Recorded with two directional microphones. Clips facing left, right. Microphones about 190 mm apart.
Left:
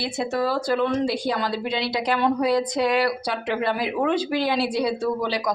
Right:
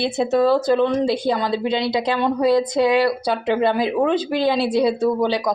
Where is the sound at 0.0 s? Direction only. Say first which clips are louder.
Right 7 dB; 25° right (ahead or behind).